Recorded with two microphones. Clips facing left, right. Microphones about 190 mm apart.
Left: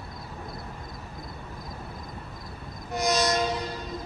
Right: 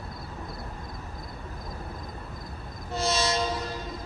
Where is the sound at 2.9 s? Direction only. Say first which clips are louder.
Left 2 dB; 15° left (ahead or behind).